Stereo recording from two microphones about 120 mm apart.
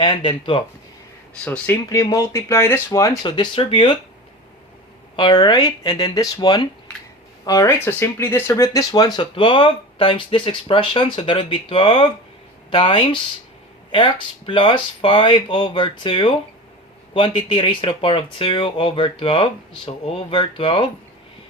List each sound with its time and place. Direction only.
0.0 s speech: 45° left (ahead or behind)
1.5 s speech: 15° left (ahead or behind)
1.9 s speech: 30° left (ahead or behind)
3.2 s speech: 40° left (ahead or behind)
5.1 s speech: 40° left (ahead or behind)